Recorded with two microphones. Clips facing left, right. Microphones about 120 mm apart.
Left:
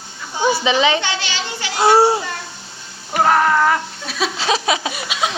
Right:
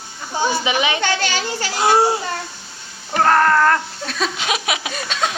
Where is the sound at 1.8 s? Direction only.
30° left (ahead or behind).